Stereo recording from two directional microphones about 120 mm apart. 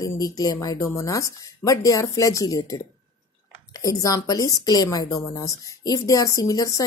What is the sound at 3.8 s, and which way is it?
Speech, 30° left (ahead or behind).